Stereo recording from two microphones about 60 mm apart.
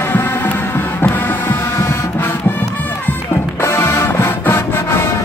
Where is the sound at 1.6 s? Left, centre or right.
Left.